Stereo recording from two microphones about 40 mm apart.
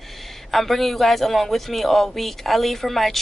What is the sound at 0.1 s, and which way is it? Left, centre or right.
A man's voice, centre.